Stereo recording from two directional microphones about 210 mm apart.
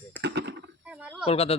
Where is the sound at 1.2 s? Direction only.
30° left (ahead or behind).